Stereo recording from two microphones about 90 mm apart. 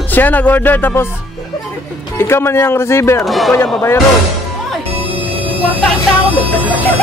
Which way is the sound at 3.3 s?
Centre (ahead or behind).